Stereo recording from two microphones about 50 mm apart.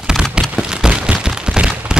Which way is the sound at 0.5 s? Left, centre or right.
Centre.